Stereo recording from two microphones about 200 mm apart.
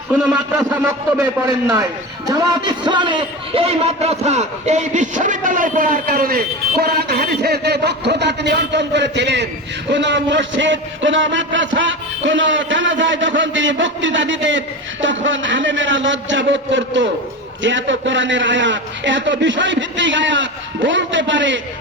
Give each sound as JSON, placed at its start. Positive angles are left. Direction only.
{"t": 0.1, "sound": "a man's voice", "side_deg": -5}
{"t": 1.5, "sound": "a man's voice", "side_deg": -20}